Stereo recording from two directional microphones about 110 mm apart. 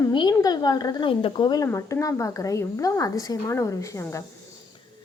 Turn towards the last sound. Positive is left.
turn(degrees=30)  # may be behind; listen again after turning